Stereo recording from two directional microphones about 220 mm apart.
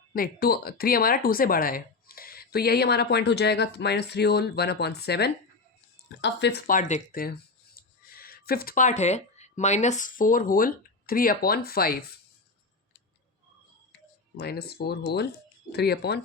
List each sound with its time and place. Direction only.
0.1 s speech: 45° left (ahead or behind)
14.3 s speech: 45° left (ahead or behind)